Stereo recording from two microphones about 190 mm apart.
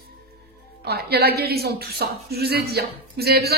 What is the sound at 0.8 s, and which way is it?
Speech, 55° right (ahead or behind).